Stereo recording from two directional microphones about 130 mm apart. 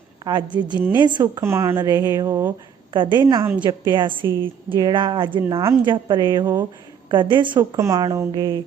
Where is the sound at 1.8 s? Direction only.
35° right (ahead or behind).